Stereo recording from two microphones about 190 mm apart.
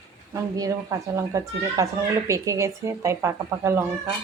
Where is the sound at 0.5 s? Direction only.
15° right (ahead or behind).